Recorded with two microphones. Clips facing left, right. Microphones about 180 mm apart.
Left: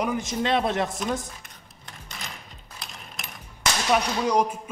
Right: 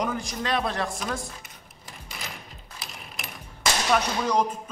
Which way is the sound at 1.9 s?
5° right (ahead or behind).